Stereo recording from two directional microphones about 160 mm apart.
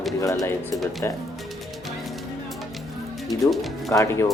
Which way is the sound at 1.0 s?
15° left (ahead or behind).